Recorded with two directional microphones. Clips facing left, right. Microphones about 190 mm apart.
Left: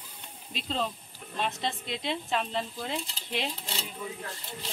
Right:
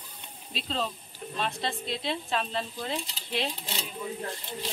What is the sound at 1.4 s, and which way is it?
Speech, 20° left (ahead or behind).